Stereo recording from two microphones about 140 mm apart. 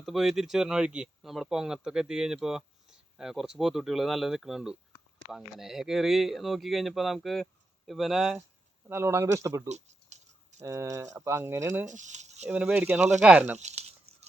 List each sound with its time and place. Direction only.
0.0 s speech: centre (ahead or behind)
8.9 s speech: 20° right (ahead or behind)
9.6 s a sound: 55° right (ahead or behind)
10.6 s speech: 20° right (ahead or behind)
11.9 s speech: 60° right (ahead or behind)
12.5 s speech: 10° right (ahead or behind)
13.6 s speech: 50° right (ahead or behind)